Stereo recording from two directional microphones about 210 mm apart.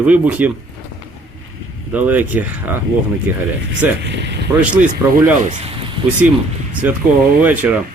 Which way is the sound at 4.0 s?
55° right (ahead or behind).